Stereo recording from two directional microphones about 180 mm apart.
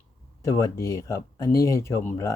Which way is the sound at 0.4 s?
15° left (ahead or behind).